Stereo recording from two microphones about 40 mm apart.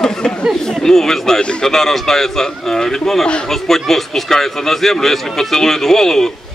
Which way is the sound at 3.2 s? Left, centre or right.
Left.